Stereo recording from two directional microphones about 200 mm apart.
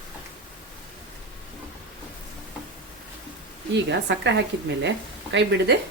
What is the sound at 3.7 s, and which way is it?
Speech, 60° right (ahead or behind).